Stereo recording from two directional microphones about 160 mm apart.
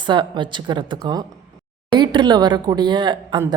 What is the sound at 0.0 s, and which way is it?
A woman's voice, 30° right (ahead or behind).